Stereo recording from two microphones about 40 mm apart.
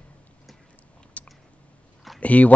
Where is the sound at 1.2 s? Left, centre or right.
Left.